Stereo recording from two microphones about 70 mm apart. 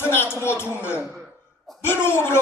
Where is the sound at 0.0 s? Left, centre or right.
Left.